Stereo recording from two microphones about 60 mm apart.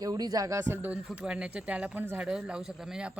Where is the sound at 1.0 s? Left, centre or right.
Centre.